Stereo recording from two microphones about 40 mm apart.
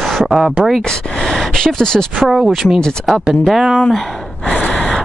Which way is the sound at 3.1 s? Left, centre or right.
Centre.